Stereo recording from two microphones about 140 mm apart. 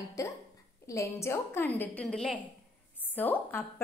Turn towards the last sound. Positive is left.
turn(degrees=15)  # may be behind; listen again after turning